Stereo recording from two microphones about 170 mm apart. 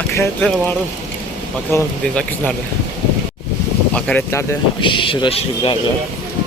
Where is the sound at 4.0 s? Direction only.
10° left (ahead or behind).